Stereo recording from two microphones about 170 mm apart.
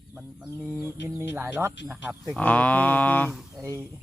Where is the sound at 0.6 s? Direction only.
5° right (ahead or behind).